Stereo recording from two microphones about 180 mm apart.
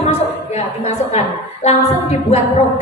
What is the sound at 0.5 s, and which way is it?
A woman's voice, 40° left (ahead or behind).